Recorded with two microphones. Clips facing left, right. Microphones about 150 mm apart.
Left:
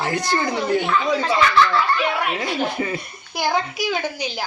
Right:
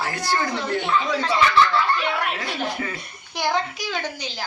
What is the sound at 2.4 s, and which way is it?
Speech, 20° left (ahead or behind).